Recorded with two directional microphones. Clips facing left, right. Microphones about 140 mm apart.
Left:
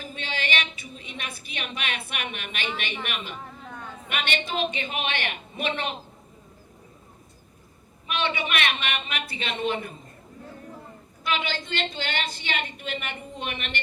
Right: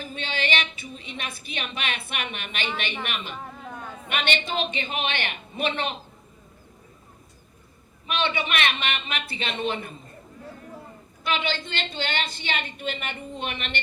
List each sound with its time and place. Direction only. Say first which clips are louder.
0.2 s a woman's voice: right 2 dB; 25° right (ahead or behind)
8.0 s a woman's voice: right 1 dB; 30° right (ahead or behind)
11.3 s a woman's voice: right 1 dB; 25° right (ahead or behind)